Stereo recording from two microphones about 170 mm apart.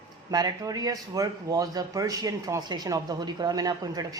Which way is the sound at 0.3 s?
25° right (ahead or behind).